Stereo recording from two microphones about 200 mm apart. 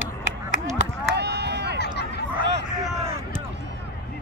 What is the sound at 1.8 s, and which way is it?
Chatter, 55° left (ahead or behind).